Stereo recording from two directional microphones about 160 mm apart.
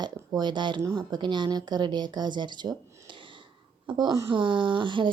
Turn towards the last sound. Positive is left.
turn(degrees=-30)  # may be behind; listen again after turning